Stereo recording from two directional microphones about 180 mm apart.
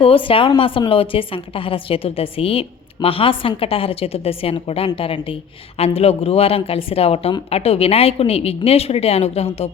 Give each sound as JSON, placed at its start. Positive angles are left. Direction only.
{"t": 0.0, "sound": "a woman's voice", "side_deg": 30}